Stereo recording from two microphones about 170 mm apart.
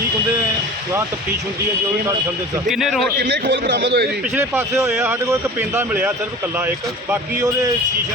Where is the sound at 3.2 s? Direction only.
75° right (ahead or behind).